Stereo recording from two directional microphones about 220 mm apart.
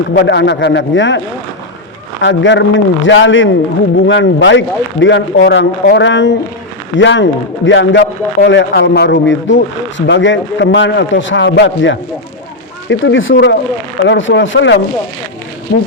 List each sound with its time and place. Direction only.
0.1 s a man's voice: 55° left (ahead or behind)
2.2 s a man's voice: 55° left (ahead or behind)